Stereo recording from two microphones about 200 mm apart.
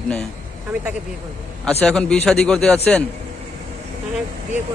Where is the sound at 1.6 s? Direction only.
5° left (ahead or behind).